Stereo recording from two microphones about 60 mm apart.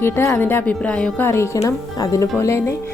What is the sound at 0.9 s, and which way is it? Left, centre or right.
Speech, centre.